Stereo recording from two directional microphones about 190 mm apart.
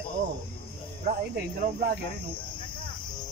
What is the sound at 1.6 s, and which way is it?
Cricket, 50° right (ahead or behind).